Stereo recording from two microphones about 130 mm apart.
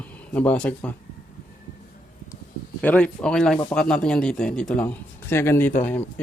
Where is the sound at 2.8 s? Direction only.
10° left (ahead or behind).